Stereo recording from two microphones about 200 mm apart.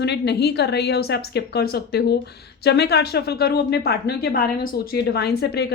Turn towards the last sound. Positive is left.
turn(degrees=55)  # may be behind; listen again after turning